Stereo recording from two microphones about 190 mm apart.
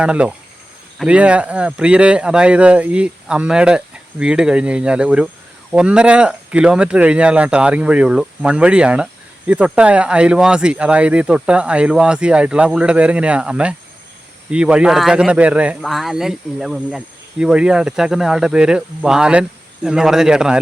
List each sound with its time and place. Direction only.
0.0 s speech: 5° right (ahead or behind)